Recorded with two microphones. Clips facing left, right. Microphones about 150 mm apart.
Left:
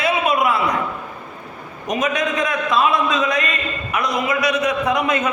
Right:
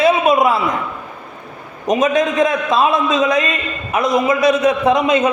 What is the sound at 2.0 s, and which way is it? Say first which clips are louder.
A man's voice: right 6 dB; 25° right (ahead or behind).